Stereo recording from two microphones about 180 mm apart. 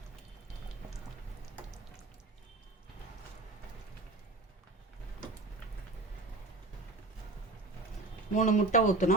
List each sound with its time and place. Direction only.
8.3 s speech: 45° left (ahead or behind)